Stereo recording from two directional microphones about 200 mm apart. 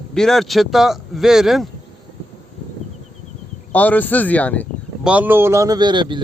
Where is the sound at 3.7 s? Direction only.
10° left (ahead or behind).